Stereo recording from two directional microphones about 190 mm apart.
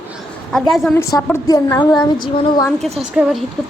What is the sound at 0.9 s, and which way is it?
A woman's voice, 15° left (ahead or behind).